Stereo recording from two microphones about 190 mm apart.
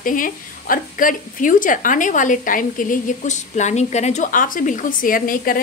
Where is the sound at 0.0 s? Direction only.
45° left (ahead or behind).